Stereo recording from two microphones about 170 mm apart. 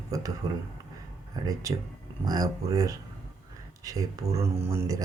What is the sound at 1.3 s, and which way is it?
Speech, 20° right (ahead or behind).